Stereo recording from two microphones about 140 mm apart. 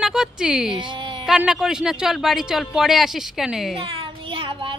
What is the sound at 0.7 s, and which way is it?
Speech, 35° right (ahead or behind).